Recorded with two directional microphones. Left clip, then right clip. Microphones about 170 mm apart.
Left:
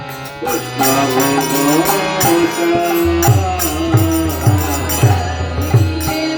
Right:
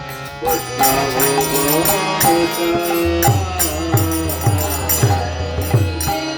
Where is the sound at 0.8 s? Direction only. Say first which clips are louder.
Left 3 dB; 35° right (ahead or behind).